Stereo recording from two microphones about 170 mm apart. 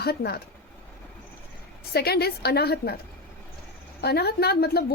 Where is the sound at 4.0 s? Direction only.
70° left (ahead or behind).